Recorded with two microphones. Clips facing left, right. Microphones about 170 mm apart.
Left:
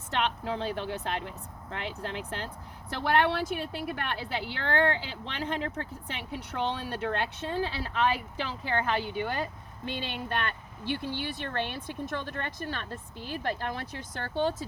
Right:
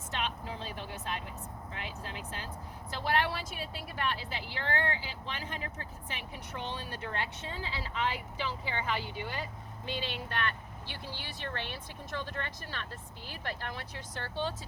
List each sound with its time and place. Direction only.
0.1 s a woman's voice: 65° left (ahead or behind)
8.4 s speech: 55° left (ahead or behind)